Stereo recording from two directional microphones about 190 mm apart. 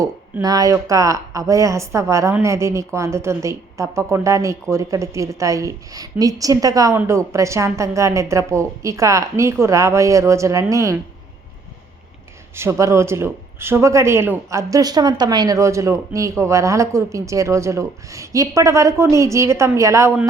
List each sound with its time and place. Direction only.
0.0 s a woman's voice: 20° right (ahead or behind)
12.5 s a woman's voice: 15° right (ahead or behind)